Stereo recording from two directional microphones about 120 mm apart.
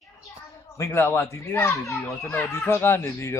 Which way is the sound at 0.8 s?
20° left (ahead or behind).